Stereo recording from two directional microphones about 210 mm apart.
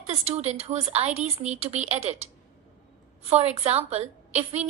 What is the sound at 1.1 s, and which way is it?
Speech, 5° right (ahead or behind).